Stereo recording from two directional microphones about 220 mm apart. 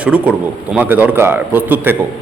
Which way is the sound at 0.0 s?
5° right (ahead or behind).